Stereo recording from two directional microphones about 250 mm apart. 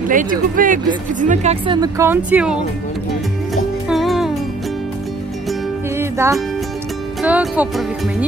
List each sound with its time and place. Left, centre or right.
0.1 s speech: right; by 2.5 s centre
3.9 s music: centre
5.9 s music: centre
7.2 s speech: centre